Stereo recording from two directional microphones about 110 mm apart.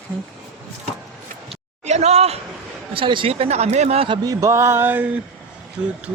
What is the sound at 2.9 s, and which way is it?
Speech, 50° right (ahead or behind).